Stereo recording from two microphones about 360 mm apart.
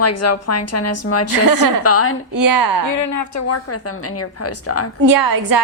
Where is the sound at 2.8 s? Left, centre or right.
Left.